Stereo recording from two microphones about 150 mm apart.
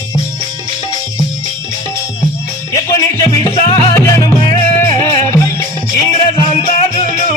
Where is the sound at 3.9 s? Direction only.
20° left (ahead or behind).